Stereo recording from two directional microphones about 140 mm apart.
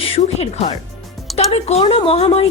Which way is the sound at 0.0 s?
45° left (ahead or behind).